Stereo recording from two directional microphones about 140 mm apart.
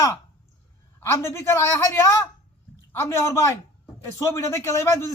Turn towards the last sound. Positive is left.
turn(degrees=20)  # may be behind; listen again after turning